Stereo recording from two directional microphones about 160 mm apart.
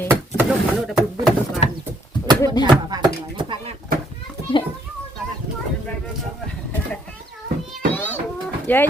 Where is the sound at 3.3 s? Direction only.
30° right (ahead or behind).